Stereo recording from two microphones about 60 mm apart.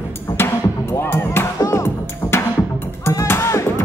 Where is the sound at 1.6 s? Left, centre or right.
Left.